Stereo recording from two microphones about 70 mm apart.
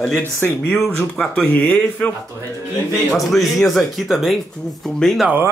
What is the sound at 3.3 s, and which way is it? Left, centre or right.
Speech, centre.